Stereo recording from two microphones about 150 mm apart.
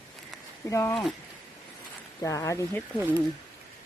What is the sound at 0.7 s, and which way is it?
Speech, 20° left (ahead or behind).